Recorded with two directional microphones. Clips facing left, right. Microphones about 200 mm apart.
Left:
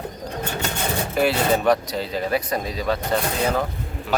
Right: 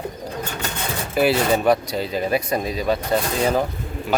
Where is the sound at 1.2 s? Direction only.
10° right (ahead or behind).